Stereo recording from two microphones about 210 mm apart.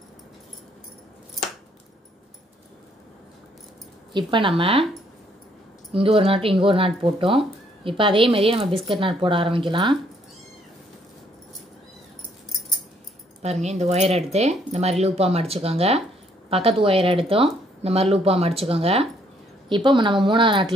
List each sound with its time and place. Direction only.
4.1 s speech: 20° right (ahead or behind)
5.9 s speech: 25° right (ahead or behind)
13.4 s speech: 30° right (ahead or behind)